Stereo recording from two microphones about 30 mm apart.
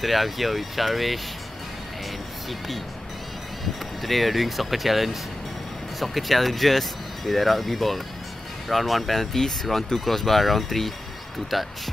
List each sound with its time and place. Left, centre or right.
0.0 s speech: centre
4.0 s speech: centre